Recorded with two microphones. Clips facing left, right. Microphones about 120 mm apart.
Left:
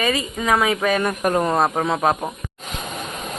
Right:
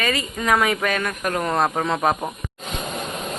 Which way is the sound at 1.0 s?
25° left (ahead or behind).